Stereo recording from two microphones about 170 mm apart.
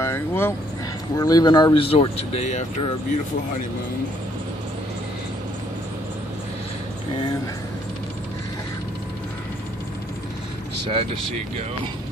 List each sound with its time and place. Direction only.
0.0 s speech: 15° left (ahead or behind); by 2.6 s 40° left (ahead or behind)
10.9 s speech: 30° right (ahead or behind)